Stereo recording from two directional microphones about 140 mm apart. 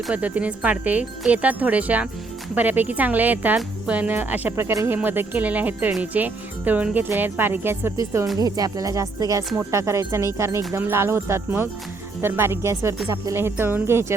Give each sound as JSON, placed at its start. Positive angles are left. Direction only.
{"t": 0.1, "sound": "speech", "side_deg": -10}